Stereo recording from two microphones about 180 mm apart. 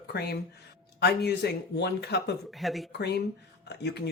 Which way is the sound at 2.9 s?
65° left (ahead or behind).